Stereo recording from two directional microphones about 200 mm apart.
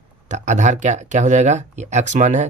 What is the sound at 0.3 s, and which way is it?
Speech, 35° right (ahead or behind).